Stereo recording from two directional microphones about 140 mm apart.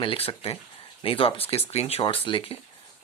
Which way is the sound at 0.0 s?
40° left (ahead or behind).